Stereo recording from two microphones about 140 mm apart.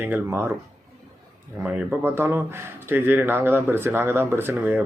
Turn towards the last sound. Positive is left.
turn(degrees=-15)  # may be behind; listen again after turning